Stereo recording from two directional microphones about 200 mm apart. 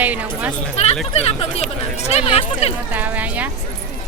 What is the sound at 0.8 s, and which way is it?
Speech, 35° left (ahead or behind).